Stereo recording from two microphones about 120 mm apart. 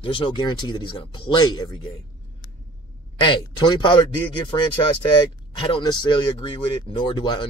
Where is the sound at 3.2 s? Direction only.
40° left (ahead or behind).